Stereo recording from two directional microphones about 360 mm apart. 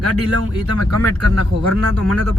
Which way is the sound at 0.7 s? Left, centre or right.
Left.